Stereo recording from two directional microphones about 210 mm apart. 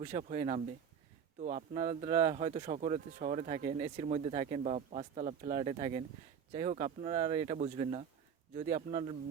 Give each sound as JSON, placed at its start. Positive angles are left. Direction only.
{"t": 0.0, "sound": "speech", "side_deg": -30}